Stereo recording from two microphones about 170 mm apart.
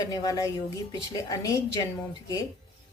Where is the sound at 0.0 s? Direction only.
20° left (ahead or behind).